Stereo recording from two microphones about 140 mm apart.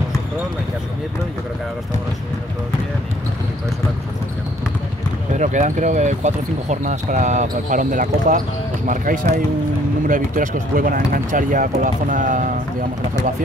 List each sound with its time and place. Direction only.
5.3 s speech: 60° right (ahead or behind)